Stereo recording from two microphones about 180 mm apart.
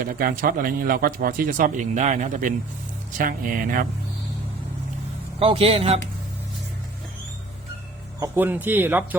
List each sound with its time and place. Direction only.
0.0 s speech: 50° right (ahead or behind)
5.4 s a man's voice: 30° right (ahead or behind)
8.2 s speech: 10° right (ahead or behind)